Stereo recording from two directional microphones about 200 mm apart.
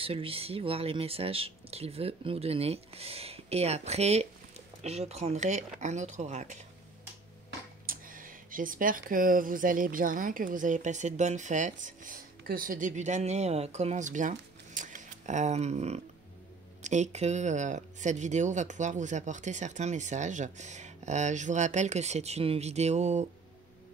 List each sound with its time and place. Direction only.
0.0 s speech: 30° right (ahead or behind)
7.8 s speech: 45° right (ahead or behind)